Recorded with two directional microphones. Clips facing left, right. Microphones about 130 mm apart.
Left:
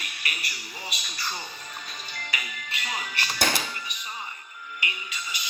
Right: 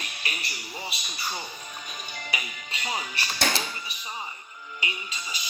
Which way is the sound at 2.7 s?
30° right (ahead or behind).